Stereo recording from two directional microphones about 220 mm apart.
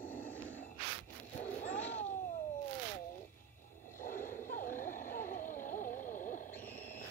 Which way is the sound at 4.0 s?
40° left (ahead or behind).